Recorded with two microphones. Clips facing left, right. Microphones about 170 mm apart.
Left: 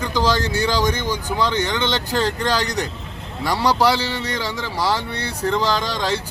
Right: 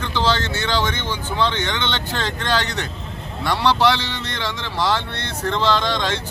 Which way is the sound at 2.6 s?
40° left (ahead or behind).